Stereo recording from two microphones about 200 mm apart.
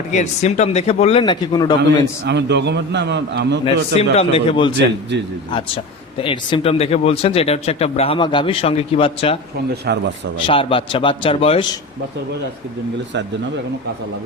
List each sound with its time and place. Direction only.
0.1 s speech: 35° left (ahead or behind)
2.2 s a man's voice: 60° right (ahead or behind)
3.6 s speech: 30° left (ahead or behind)
10.4 s speech: 25° left (ahead or behind)